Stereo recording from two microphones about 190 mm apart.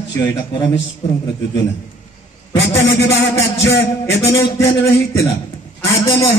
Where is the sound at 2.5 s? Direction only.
70° left (ahead or behind).